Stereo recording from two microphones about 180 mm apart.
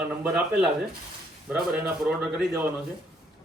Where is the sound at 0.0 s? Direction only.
5° right (ahead or behind).